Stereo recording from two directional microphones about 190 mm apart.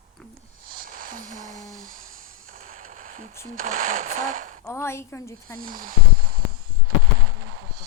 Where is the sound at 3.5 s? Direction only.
45° right (ahead or behind).